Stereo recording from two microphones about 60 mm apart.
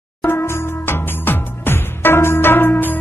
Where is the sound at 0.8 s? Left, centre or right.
Left.